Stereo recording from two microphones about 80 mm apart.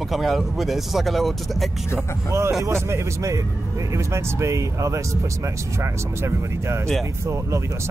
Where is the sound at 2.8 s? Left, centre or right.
Right.